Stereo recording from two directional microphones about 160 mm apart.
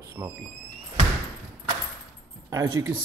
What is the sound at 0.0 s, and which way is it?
Speech, 15° right (ahead or behind).